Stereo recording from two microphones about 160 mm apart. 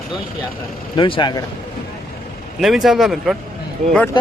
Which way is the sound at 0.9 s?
30° left (ahead or behind).